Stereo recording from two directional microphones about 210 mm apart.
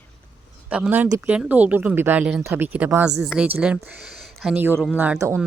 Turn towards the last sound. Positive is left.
turn(degrees=-10)  # may be behind; listen again after turning